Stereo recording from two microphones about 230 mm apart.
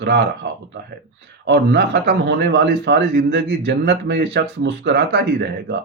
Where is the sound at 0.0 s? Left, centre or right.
Right.